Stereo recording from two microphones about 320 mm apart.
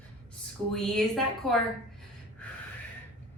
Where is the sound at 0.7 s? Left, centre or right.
Centre.